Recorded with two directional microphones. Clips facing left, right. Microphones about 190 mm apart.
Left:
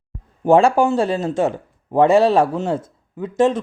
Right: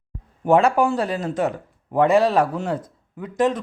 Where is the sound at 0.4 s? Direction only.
30° left (ahead or behind).